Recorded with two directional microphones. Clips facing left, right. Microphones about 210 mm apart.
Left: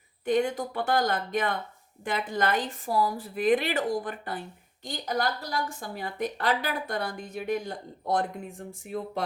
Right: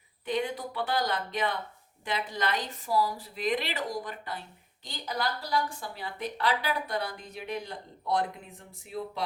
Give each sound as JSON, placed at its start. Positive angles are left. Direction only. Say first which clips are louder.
{"t": 0.3, "sound": "a woman's voice", "louder": "left 5 dB", "side_deg": 45}